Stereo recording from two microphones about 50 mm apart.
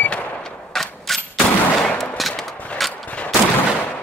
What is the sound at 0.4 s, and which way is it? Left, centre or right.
Gunshot, centre.